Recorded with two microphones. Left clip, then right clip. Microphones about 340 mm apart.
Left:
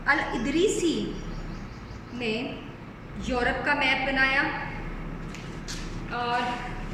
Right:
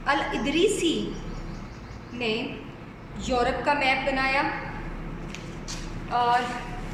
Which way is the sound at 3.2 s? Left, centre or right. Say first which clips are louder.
Right 2 dB; centre.